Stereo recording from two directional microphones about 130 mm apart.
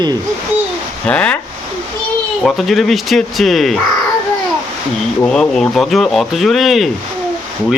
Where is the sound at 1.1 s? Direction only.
10° left (ahead or behind).